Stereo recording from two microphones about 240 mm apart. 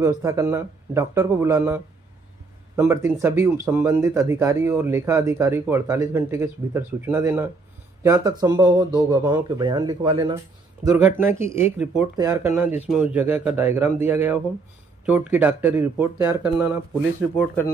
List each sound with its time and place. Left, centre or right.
0.0 s speech: centre